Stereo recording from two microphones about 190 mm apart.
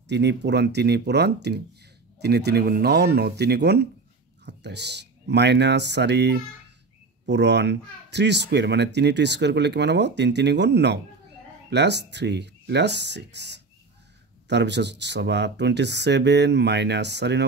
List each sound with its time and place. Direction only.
0.1 s speech: 65° right (ahead or behind)